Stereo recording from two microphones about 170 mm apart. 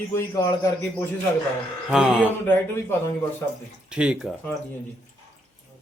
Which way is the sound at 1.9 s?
5° right (ahead or behind).